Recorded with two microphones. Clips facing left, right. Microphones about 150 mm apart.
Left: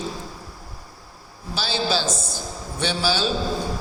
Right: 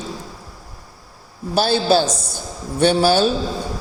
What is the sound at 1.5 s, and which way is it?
A man's voice, 55° right (ahead or behind).